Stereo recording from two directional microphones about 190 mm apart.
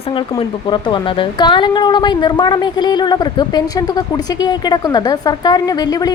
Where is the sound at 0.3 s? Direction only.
25° left (ahead or behind).